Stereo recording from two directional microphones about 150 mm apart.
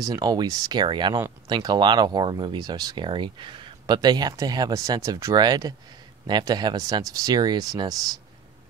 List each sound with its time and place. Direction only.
0.0 s speech: 25° right (ahead or behind)